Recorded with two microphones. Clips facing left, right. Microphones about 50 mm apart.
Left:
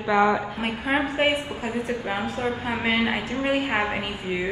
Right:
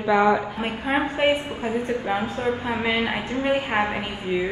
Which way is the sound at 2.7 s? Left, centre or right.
Left.